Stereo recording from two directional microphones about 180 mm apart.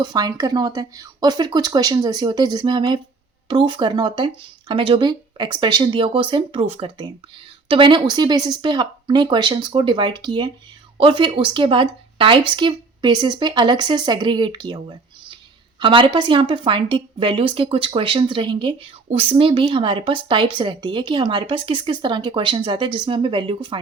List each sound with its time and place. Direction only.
0.0 s speech: 20° right (ahead or behind)